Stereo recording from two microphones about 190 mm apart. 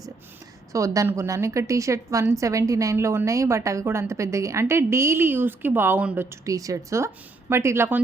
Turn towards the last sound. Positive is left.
turn(degrees=-15)  # may be behind; listen again after turning